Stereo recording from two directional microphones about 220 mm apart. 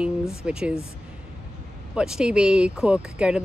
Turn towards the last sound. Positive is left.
turn(degrees=-5)  # may be behind; listen again after turning